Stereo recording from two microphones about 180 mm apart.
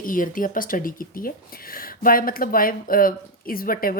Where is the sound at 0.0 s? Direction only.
50° left (ahead or behind).